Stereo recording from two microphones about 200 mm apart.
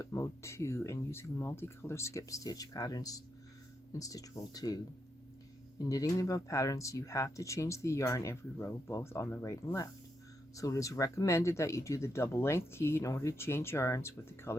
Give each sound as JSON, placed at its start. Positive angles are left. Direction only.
{"t": 0.0, "sound": "speech", "side_deg": 15}
{"t": 5.8, "sound": "speech", "side_deg": 15}